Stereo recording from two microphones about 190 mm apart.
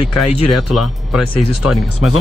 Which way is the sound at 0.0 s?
Centre (ahead or behind).